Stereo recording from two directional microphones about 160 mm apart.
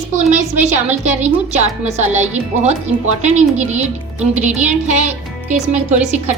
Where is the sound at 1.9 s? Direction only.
45° right (ahead or behind).